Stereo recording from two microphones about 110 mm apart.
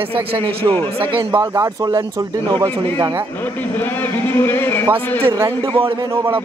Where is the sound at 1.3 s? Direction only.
35° right (ahead or behind).